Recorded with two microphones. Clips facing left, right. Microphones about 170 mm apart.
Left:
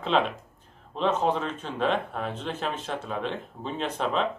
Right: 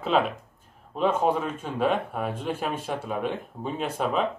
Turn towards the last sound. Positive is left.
turn(degrees=-10)  # may be behind; listen again after turning